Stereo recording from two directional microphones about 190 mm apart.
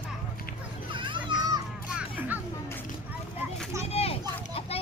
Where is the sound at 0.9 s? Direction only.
25° right (ahead or behind).